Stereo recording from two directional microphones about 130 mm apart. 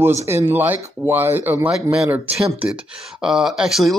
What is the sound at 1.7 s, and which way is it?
Speech, 5° right (ahead or behind).